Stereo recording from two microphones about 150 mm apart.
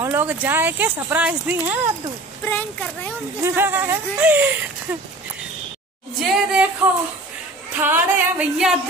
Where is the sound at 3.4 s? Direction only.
15° right (ahead or behind).